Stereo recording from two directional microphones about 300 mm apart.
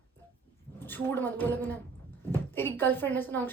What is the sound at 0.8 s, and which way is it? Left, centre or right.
A woman's voice, centre.